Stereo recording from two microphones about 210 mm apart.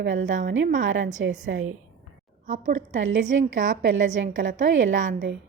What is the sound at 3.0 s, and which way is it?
A woman's voice, 60° right (ahead or behind).